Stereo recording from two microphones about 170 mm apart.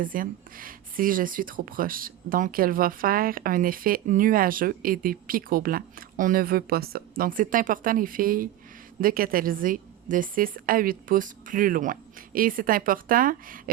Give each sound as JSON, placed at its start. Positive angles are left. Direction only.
{"t": 0.0, "sound": "speech", "side_deg": -55}